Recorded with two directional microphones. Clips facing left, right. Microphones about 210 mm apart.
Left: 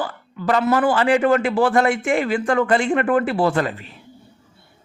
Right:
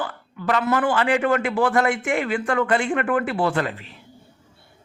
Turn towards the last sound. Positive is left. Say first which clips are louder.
# left 3 dB
turn(degrees=40)  # may be behind; listen again after turning